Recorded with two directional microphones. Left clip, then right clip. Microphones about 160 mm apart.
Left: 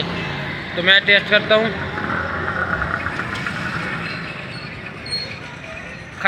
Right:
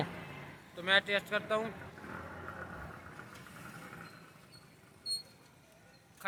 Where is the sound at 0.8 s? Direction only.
30° right (ahead or behind).